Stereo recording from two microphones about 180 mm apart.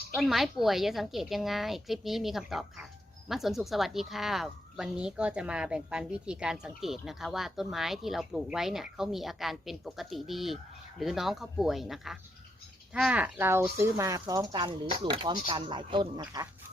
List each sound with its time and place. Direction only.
0.1 s speech: centre (ahead or behind); by 16.5 s 20° right (ahead or behind)